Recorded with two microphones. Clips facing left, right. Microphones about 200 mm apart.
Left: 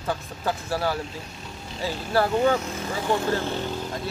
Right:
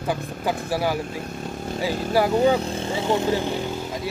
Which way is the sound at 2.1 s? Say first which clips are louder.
Right 2 dB; 15° right (ahead or behind).